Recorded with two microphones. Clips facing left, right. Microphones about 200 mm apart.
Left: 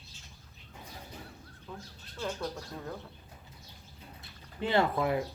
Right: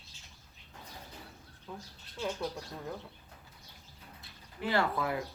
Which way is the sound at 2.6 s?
Centre (ahead or behind).